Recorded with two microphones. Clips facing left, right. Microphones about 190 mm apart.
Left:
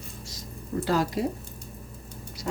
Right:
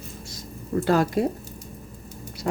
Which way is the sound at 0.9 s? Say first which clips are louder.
Right 5 dB; 55° right (ahead or behind).